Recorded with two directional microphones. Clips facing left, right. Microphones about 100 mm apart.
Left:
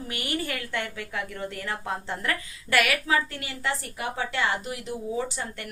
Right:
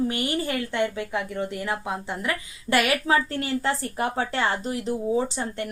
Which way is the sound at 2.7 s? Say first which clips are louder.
Right 3 dB; 25° right (ahead or behind).